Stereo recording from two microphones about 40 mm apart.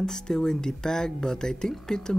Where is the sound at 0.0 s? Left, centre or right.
Centre.